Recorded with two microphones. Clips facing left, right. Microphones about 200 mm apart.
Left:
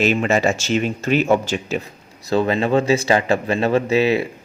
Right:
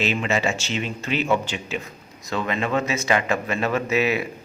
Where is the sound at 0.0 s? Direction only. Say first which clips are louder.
Left 6 dB; 45° left (ahead or behind).